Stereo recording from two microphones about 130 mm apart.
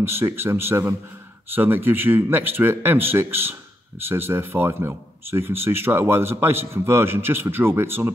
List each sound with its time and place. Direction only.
0.0 s a man's voice: 20° right (ahead or behind)